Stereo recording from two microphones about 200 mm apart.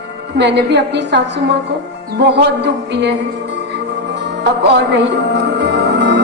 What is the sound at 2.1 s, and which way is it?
Music, 60° right (ahead or behind).